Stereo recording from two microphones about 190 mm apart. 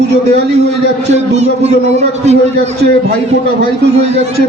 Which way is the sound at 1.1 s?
35° right (ahead or behind).